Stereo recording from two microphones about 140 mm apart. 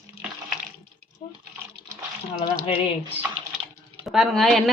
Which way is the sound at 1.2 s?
45° left (ahead or behind).